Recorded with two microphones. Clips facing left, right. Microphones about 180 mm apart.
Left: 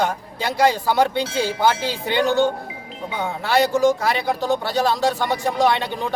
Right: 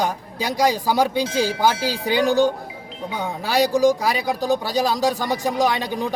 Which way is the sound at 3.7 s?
35° right (ahead or behind).